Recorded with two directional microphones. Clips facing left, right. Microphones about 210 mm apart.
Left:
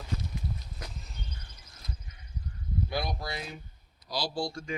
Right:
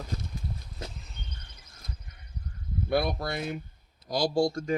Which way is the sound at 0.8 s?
25° right (ahead or behind).